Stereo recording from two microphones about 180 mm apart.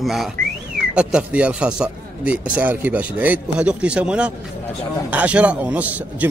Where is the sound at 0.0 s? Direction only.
Centre (ahead or behind).